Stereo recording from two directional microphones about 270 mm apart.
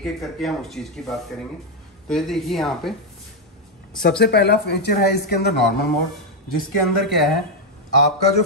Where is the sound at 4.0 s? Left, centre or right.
Left.